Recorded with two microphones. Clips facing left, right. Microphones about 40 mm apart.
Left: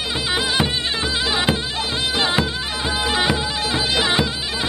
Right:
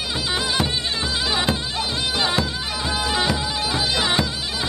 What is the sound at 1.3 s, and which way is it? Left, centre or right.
Bagpipes, centre.